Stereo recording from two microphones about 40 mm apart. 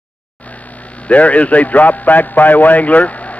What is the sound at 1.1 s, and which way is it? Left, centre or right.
A man's voice, left.